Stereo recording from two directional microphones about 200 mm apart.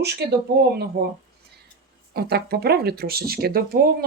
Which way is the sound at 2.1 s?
50° right (ahead or behind).